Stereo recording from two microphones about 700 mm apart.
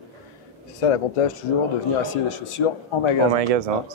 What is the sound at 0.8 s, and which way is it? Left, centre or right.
Speech, left.